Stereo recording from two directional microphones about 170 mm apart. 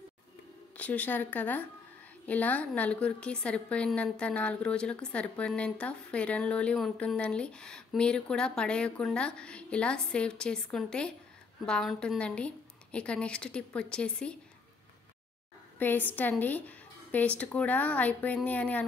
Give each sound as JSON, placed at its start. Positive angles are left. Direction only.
{"t": 0.7, "sound": "a woman's voice", "side_deg": 10}
{"t": 15.8, "sound": "a woman's voice", "side_deg": 10}